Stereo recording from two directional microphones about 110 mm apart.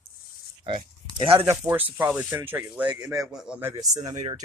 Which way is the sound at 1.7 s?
15° right (ahead or behind).